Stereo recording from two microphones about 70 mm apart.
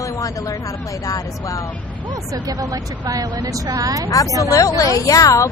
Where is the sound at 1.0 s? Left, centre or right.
Left.